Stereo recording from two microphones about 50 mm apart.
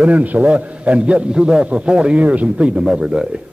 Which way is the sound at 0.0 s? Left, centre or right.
Right.